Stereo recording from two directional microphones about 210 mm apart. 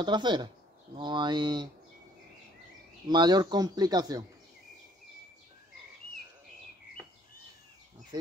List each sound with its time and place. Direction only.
0.0 s speech: 20° right (ahead or behind)
3.1 s speech: 20° right (ahead or behind)
8.1 s insect: 20° right (ahead or behind)